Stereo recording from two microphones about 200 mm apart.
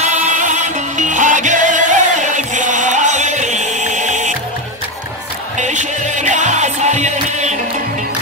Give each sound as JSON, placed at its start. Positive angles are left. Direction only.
{"t": 0.1, "sound": "music", "side_deg": -40}
{"t": 5.6, "sound": "music", "side_deg": -35}